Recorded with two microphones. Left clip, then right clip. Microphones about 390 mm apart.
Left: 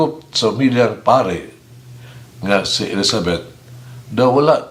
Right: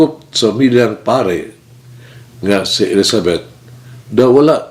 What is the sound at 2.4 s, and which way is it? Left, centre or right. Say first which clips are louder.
Speech: right 4 dB; left.